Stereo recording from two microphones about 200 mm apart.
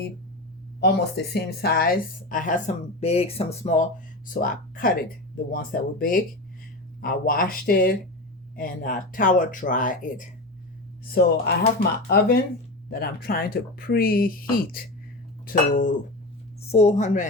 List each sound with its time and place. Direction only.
0.8 s speech: 55° left (ahead or behind); by 17.2 s 35° left (ahead or behind)